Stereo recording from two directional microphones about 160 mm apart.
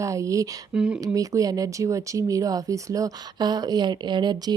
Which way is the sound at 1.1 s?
20° right (ahead or behind).